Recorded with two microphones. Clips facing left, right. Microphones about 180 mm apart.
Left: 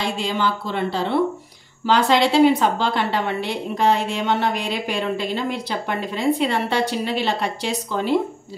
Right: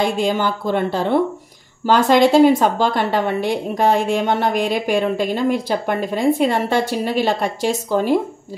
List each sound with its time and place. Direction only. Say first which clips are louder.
0.0 s a woman's voice: right 5 dB; 50° right (ahead or behind)